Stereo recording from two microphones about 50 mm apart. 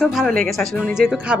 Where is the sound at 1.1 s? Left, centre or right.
Right.